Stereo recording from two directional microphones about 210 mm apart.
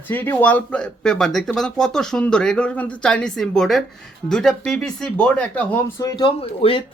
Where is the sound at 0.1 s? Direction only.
10° left (ahead or behind).